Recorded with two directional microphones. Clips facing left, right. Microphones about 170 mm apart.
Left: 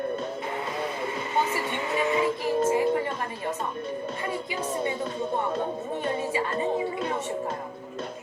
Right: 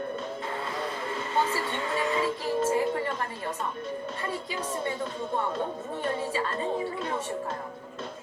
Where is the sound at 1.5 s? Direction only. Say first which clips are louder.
Left 2 dB; 20° left (ahead or behind).